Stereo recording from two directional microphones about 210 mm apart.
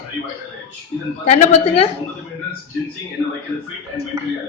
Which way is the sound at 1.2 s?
30° left (ahead or behind).